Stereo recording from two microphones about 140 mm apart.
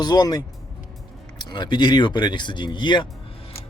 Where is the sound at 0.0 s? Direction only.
30° left (ahead or behind).